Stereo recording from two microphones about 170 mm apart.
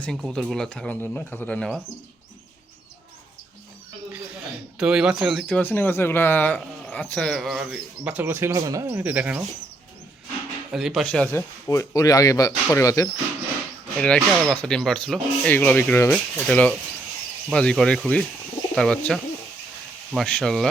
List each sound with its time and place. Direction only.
0.0 s speech: 5° left (ahead or behind)
4.8 s speech: 5° right (ahead or behind)
10.7 s speech: centre (ahead or behind); by 13.1 s 20° left (ahead or behind)
14.0 s speech: 5° left (ahead or behind)